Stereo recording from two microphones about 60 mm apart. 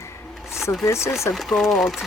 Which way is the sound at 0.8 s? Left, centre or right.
Left.